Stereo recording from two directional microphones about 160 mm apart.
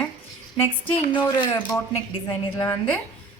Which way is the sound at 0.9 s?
35° left (ahead or behind).